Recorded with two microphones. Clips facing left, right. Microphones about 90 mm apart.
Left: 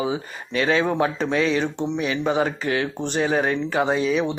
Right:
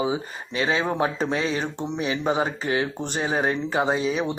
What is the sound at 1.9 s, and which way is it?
Speech, 25° right (ahead or behind).